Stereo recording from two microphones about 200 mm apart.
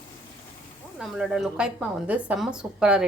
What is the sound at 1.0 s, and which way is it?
A woman's voice, centre (ahead or behind).